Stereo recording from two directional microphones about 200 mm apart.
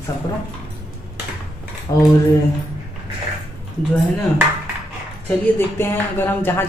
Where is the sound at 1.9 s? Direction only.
20° left (ahead or behind).